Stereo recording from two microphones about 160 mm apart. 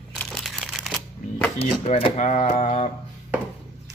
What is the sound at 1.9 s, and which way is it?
Speech, 45° left (ahead or behind).